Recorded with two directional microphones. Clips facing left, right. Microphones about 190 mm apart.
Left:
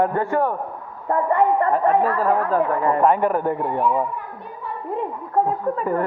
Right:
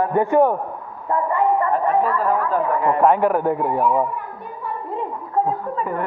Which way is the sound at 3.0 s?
5° right (ahead or behind).